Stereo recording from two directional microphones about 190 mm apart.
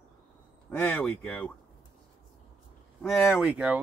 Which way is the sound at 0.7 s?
10° left (ahead or behind).